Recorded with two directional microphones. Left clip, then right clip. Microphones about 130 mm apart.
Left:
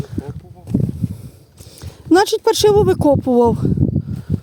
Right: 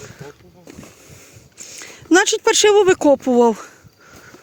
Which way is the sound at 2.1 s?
65° left (ahead or behind).